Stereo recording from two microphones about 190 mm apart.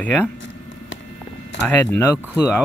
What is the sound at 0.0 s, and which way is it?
Speech, 5° left (ahead or behind).